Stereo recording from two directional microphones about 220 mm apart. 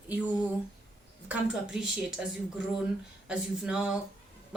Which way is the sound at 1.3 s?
5° right (ahead or behind).